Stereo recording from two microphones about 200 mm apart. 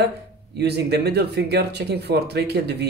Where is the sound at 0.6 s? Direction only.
55° right (ahead or behind).